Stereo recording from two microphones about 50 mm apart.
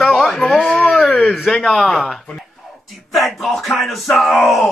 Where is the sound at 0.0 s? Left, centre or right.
Centre.